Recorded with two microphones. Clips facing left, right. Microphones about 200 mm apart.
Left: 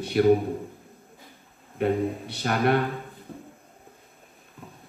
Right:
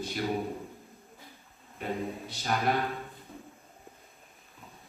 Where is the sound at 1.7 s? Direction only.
65° left (ahead or behind).